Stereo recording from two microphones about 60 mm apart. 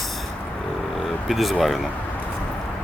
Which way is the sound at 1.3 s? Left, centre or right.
Centre.